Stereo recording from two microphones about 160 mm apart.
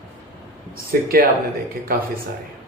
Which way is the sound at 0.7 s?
70° right (ahead or behind).